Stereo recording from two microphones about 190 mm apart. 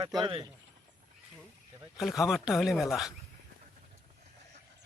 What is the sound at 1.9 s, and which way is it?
Speech, centre (ahead or behind).